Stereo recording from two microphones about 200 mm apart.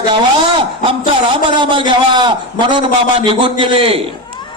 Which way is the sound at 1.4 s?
25° right (ahead or behind).